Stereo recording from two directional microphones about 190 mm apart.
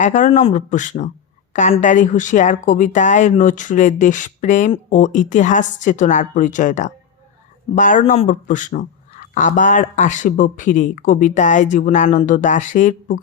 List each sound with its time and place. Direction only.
0.0 s speech: 40° left (ahead or behind)